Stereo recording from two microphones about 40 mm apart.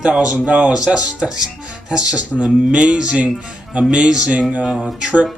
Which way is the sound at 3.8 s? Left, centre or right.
Right.